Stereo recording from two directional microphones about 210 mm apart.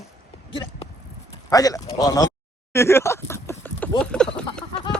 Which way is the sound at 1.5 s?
15° left (ahead or behind).